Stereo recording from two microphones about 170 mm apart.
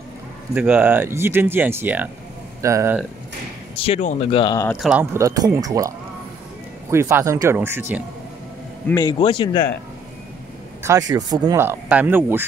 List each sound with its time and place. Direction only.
0.6 s speech: 10° right (ahead or behind)
3.7 s speech: 35° left (ahead or behind)
4.3 s a man's voice: 30° left (ahead or behind)
4.7 s speech: 5° right (ahead or behind)
5.1 s speech: 20° right (ahead or behind)
9.0 s a man's voice: 25° left (ahead or behind)
10.8 s speech: 20° right (ahead or behind)
11.6 s speech: 10° right (ahead or behind)